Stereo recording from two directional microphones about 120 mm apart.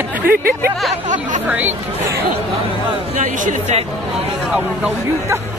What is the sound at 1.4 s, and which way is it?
Speech, 15° right (ahead or behind).